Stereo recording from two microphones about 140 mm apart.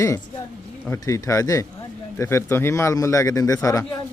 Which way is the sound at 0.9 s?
25° left (ahead or behind).